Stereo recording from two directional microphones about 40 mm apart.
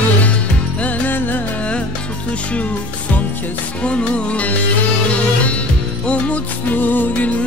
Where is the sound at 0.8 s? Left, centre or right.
Left.